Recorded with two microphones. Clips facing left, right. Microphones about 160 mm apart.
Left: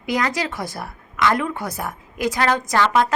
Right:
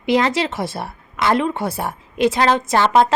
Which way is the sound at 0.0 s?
25° right (ahead or behind).